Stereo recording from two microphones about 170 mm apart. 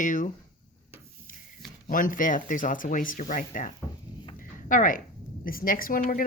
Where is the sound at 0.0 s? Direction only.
50° left (ahead or behind).